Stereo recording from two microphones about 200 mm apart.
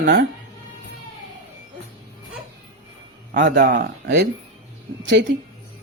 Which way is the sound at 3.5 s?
60° right (ahead or behind).